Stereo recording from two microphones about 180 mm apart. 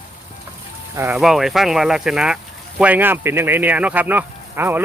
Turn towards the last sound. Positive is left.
turn(degrees=-10)  # may be behind; listen again after turning